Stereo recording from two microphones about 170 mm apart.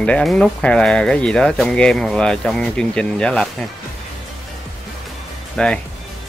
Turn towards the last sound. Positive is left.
turn(degrees=5)  # may be behind; listen again after turning